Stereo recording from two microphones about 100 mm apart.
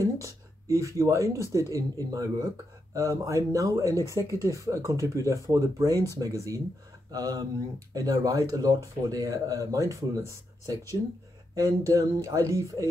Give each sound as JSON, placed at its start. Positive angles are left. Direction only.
{"t": 0.0, "sound": "speech", "side_deg": -30}